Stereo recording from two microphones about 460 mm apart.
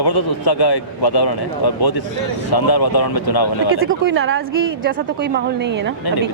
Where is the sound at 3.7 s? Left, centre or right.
Right.